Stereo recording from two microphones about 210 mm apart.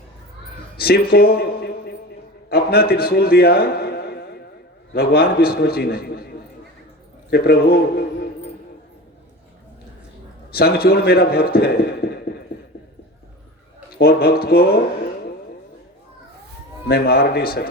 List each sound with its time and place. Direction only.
0.8 s a sound: 45° left (ahead or behind)
2.5 s a man's voice: 50° left (ahead or behind)
7.3 s a man's voice: 50° left (ahead or behind)
10.5 s a man's voice: 45° left (ahead or behind)
13.9 s a man's voice: 50° left (ahead or behind)
16.9 s a man's voice: 50° left (ahead or behind)